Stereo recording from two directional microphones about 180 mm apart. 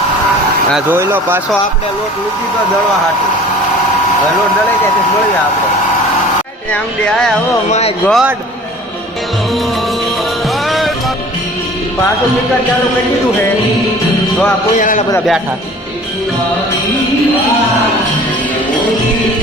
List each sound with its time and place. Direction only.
0.9 s speech: 10° right (ahead or behind)
6.7 s speech: 5° left (ahead or behind)
7.7 s speech: 35° left (ahead or behind)
8.0 s speech: centre (ahead or behind)
10.7 s music: centre (ahead or behind)
14.8 s a man's voice: 45° left (ahead or behind)